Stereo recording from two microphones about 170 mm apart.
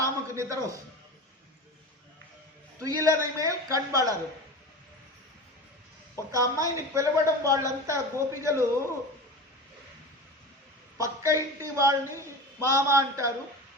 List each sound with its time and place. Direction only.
0.0 s a man's voice: 20° right (ahead or behind)
2.8 s a woman's voice: 20° right (ahead or behind)
6.3 s a woman's voice: 20° right (ahead or behind)
11.0 s a man's voice: 20° right (ahead or behind)